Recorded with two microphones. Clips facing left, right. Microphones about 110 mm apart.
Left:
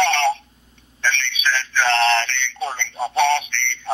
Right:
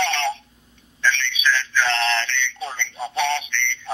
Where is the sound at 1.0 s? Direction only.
55° left (ahead or behind).